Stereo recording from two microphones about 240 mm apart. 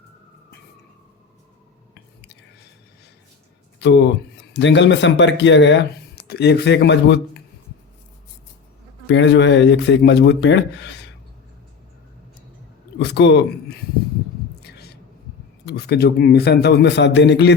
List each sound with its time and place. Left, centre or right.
3.8 s speech: left
9.0 s speech: left
13.1 s speech: left
15.6 s speech: left